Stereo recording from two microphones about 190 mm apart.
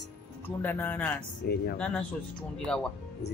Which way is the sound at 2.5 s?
5° left (ahead or behind).